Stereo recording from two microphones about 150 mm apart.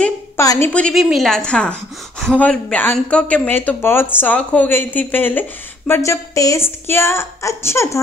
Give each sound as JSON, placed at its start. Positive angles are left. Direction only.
{"t": 0.4, "sound": "a woman's voice", "side_deg": 20}
{"t": 0.7, "sound": "a woman's voice", "side_deg": 5}